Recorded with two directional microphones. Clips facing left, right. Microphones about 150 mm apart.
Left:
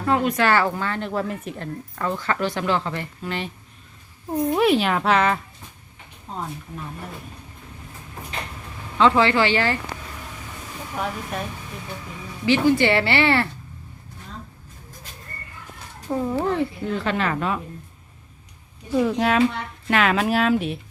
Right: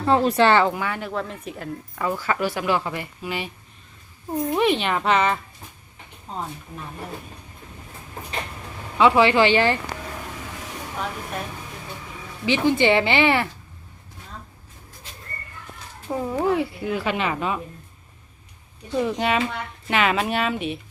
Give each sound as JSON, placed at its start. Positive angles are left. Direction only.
{"t": 0.1, "sound": "speech", "side_deg": -30}
{"t": 1.1, "sound": "speech", "side_deg": 5}
{"t": 4.3, "sound": "a child's voice", "side_deg": 5}
{"t": 9.0, "sound": "speech", "side_deg": -15}
{"t": 12.5, "sound": "speech", "side_deg": -20}
{"t": 16.0, "sound": "speech", "side_deg": -10}
{"t": 18.9, "sound": "a child's voice", "side_deg": 0}